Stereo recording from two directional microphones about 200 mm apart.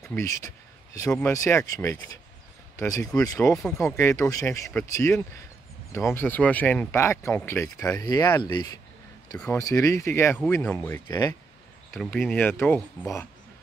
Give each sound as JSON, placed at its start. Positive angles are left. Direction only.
{"t": 0.0, "sound": "speech", "side_deg": 10}
{"t": 3.5, "sound": "speech", "side_deg": 0}
{"t": 3.8, "sound": "speech", "side_deg": 15}
{"t": 11.1, "sound": "speech", "side_deg": 20}
{"t": 12.0, "sound": "speech", "side_deg": 0}